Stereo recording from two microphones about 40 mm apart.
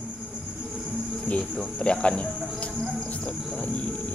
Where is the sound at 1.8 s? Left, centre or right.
Left.